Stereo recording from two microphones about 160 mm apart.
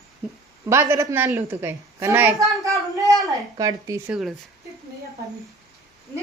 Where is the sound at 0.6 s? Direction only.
15° right (ahead or behind).